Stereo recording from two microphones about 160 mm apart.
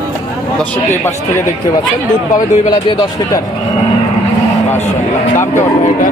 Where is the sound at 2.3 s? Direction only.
25° left (ahead or behind).